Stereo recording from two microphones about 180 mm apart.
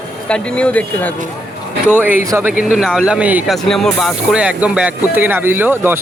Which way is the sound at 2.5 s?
50° left (ahead or behind).